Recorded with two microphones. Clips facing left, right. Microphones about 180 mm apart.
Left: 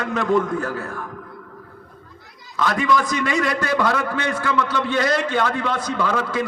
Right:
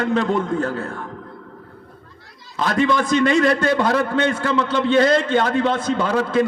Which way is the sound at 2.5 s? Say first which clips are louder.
Right 1 dB; 30° right (ahead or behind).